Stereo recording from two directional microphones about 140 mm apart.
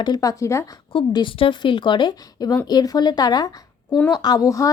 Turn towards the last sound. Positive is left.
turn(degrees=25)  # may be behind; listen again after turning